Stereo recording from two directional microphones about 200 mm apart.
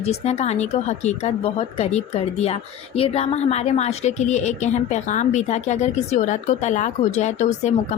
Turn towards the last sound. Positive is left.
turn(degrees=35)  # may be behind; listen again after turning